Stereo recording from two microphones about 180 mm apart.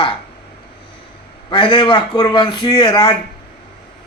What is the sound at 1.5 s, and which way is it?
Speech, 25° left (ahead or behind).